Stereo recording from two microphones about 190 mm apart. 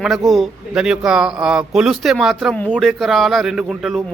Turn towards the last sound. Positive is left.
turn(degrees=0)  # may be behind; listen again after turning